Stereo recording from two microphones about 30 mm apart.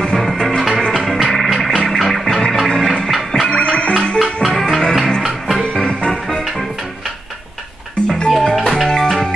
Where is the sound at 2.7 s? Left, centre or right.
Centre.